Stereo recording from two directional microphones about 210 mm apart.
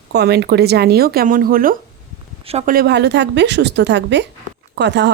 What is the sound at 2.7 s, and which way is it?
A woman's voice, 50° right (ahead or behind).